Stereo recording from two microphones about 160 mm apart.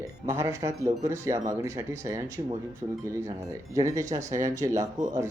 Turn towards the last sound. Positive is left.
turn(degrees=-20)  # may be behind; listen again after turning